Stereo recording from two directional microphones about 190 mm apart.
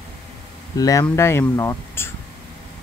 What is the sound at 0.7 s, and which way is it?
Speech, 15° left (ahead or behind).